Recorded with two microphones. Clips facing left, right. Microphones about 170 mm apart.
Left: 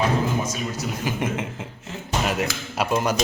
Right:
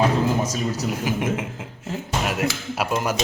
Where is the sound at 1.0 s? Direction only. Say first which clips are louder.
Even; 5° right (ahead or behind).